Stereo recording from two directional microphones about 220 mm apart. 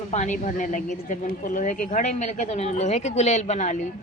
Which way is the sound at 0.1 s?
35° left (ahead or behind).